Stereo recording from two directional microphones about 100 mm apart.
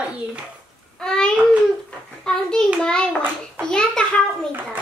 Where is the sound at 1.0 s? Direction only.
5° left (ahead or behind).